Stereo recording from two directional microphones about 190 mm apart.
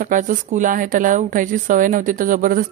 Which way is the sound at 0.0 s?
45° right (ahead or behind).